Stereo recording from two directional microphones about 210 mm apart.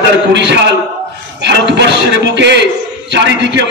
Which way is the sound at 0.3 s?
55° right (ahead or behind).